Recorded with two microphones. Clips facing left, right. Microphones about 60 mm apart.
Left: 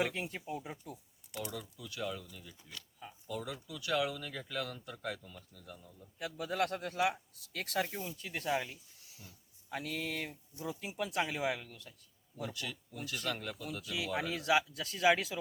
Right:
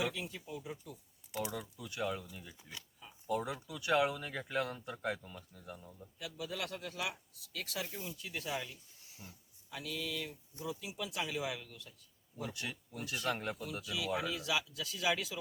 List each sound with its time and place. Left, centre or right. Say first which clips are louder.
0.0 s speech: left 3 dB; left
1.3 s speech: right 2 dB; centre
6.1 s a man's voice: left 7 dB; left
9.0 s a sound: right 3 dB; right
9.6 s a man's voice: left 3 dB; left
12.5 s speech: even; right
14.2 s speech: left 5 dB; left